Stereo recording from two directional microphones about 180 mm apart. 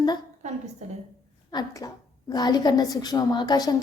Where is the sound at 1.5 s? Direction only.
20° left (ahead or behind).